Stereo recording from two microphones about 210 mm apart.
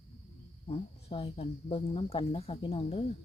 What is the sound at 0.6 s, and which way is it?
Speech, 25° left (ahead or behind).